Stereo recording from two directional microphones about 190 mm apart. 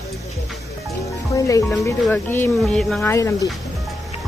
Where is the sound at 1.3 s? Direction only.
15° left (ahead or behind).